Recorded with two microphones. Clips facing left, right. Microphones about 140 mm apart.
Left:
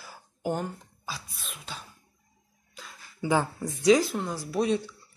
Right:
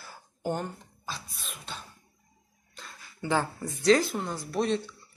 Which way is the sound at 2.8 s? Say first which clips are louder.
Left 3 dB; 10° left (ahead or behind).